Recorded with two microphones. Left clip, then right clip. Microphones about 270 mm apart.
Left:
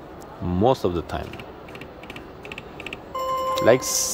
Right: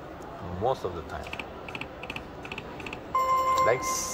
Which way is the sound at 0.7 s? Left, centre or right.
Left.